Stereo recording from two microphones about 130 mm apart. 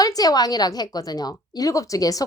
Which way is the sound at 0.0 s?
30° left (ahead or behind).